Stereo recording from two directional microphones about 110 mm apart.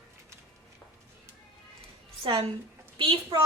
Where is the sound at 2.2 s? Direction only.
55° right (ahead or behind).